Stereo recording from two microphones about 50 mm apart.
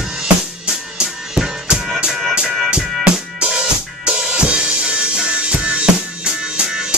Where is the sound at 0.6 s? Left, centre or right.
Centre.